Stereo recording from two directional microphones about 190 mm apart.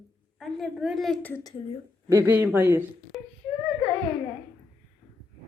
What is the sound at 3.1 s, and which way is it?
Wail, centre (ahead or behind).